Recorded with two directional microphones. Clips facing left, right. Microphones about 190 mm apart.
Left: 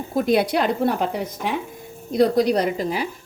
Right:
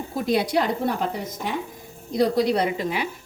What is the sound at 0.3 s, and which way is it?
Speech, 60° left (ahead or behind).